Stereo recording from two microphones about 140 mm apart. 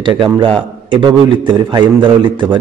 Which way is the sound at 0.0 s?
35° right (ahead or behind).